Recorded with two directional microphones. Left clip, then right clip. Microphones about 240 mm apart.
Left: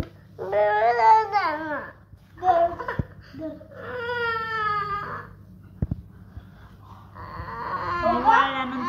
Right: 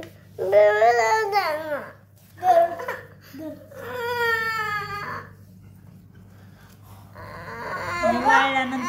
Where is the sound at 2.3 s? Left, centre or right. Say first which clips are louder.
Right 3 dB; right.